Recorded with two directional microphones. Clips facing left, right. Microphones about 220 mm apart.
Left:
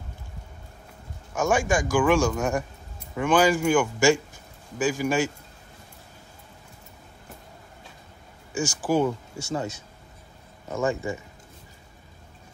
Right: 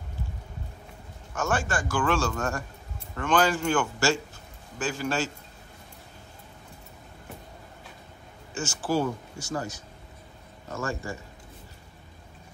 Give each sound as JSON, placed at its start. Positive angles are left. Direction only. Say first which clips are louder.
{"t": 1.3, "sound": "a man's voice", "louder": "left 5 dB", "side_deg": 10}
{"t": 8.5, "sound": "a man's voice", "louder": "left 4 dB", "side_deg": 15}
{"t": 9.4, "sound": "speech", "louder": "left 3 dB", "side_deg": 25}